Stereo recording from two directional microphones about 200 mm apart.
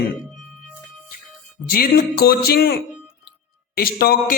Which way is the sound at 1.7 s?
50° left (ahead or behind).